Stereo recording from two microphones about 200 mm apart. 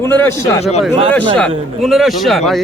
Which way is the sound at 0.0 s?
10° left (ahead or behind).